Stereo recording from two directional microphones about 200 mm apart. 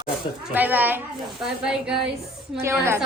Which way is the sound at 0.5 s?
10° right (ahead or behind).